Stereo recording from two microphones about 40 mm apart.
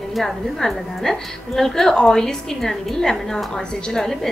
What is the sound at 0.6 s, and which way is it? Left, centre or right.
A woman's voice, centre.